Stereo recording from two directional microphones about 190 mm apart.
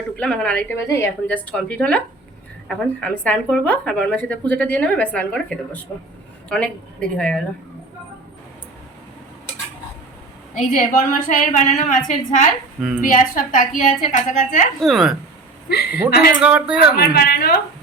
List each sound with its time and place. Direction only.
0.2 s speech: 5° left (ahead or behind)
7.2 s a woman's voice: 5° left (ahead or behind)
10.7 s a woman's voice: 45° left (ahead or behind)
14.8 s a woman's voice: centre (ahead or behind)
15.7 s a woman's voice: 60° left (ahead or behind)
16.4 s a woman's voice: 5° right (ahead or behind)
17.0 s a woman's voice: 55° left (ahead or behind)